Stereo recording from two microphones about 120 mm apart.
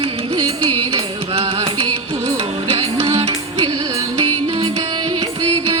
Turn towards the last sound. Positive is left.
turn(degrees=-50)  # may be behind; listen again after turning